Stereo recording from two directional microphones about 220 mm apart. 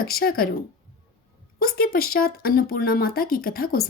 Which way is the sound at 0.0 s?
45° left (ahead or behind).